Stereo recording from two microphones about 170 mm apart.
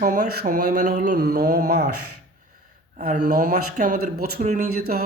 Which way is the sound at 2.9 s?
45° right (ahead or behind).